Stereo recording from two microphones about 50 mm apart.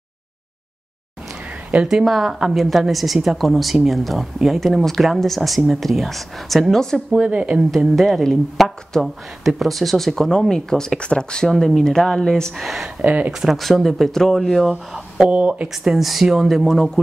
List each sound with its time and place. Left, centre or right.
1.8 s speech: centre
7.2 s speech: right
7.7 s speech: centre
11.4 s speech: centre
12.5 s speech: centre
13.0 s speech: right
13.3 s speech: centre
15.2 s speech: right
15.8 s speech: centre